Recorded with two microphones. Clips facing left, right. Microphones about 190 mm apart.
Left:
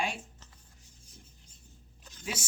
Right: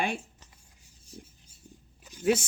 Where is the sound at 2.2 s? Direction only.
60° right (ahead or behind).